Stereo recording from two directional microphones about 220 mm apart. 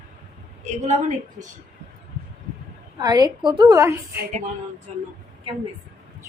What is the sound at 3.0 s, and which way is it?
A woman's voice, 15° right (ahead or behind).